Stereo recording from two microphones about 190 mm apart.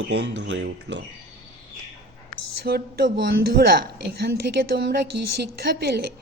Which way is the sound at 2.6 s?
55° right (ahead or behind).